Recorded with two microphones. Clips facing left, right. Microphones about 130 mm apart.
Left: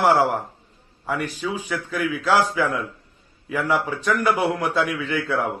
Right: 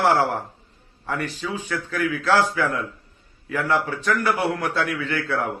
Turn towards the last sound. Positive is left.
turn(degrees=15)  # may be behind; listen again after turning